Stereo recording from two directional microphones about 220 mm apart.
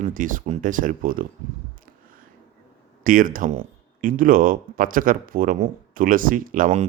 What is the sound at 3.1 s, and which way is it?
Speech, 40° right (ahead or behind).